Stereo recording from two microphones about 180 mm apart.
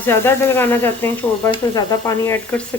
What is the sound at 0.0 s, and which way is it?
Speech, 15° left (ahead or behind).